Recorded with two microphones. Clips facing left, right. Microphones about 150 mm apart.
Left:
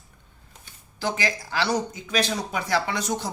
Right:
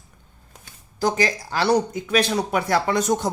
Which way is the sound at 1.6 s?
55° right (ahead or behind).